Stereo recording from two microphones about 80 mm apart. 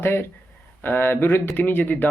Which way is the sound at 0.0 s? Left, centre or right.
Left.